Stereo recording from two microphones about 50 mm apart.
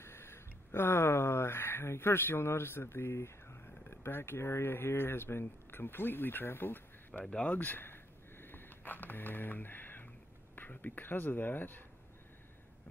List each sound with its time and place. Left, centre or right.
0.0 s speech: left
7.4 s a sound: left
10.5 s speech: left